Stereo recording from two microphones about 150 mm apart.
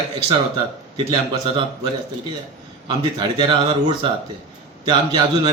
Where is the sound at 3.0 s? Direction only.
30° right (ahead or behind).